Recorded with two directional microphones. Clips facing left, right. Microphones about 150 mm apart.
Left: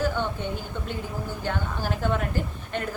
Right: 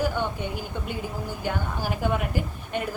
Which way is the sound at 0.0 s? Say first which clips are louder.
Even; 10° right (ahead or behind).